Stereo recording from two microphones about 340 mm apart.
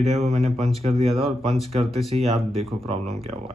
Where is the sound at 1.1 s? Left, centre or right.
Centre.